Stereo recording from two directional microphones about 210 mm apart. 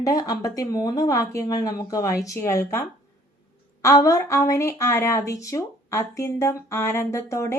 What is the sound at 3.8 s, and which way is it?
A woman's voice, 15° left (ahead or behind).